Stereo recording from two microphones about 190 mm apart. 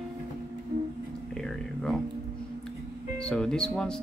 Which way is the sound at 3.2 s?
5° left (ahead or behind).